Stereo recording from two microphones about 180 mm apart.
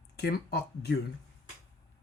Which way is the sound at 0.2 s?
60° left (ahead or behind).